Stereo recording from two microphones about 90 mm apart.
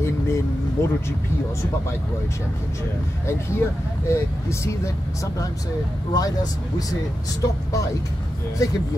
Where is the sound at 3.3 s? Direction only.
30° left (ahead or behind).